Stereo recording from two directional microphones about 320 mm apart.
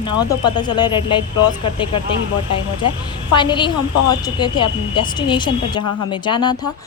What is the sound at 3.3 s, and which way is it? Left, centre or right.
A woman's voice, centre.